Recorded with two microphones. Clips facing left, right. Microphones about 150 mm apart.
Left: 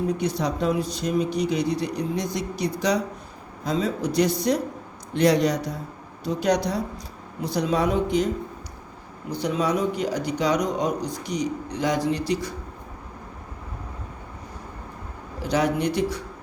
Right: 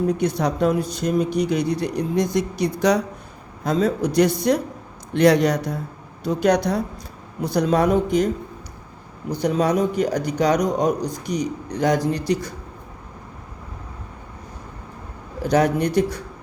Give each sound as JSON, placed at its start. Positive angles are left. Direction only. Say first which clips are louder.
{"t": 0.2, "sound": "speech", "louder": "right 4 dB", "side_deg": -55}
{"t": 4.5, "sound": "a man's voice", "louder": "right 3 dB", "side_deg": -60}
{"t": 9.4, "sound": "speech", "louder": "right 4 dB", "side_deg": -45}
{"t": 15.4, "sound": "speech", "louder": "right 4 dB", "side_deg": -50}